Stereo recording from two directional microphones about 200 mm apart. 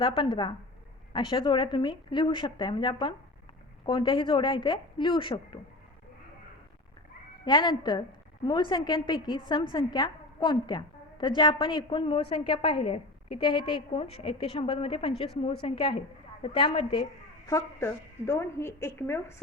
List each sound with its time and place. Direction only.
0.0 s a woman's voice: 25° left (ahead or behind)
7.4 s a woman's voice: 20° left (ahead or behind)